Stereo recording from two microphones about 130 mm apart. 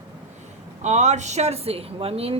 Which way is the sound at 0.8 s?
60° right (ahead or behind).